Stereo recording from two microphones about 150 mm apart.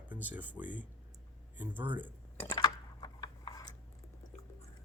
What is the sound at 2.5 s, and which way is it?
Chewing, 25° left (ahead or behind).